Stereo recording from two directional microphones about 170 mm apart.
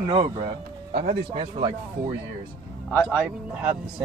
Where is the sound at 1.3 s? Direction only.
30° right (ahead or behind).